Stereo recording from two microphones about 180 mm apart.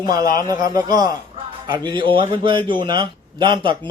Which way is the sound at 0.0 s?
20° right (ahead or behind).